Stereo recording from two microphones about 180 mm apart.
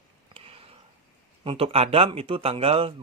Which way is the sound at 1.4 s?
30° right (ahead or behind).